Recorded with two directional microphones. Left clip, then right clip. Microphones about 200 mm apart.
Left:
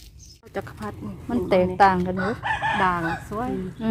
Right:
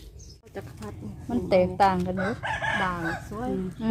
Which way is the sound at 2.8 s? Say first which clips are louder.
Left 6 dB; 40° left (ahead or behind).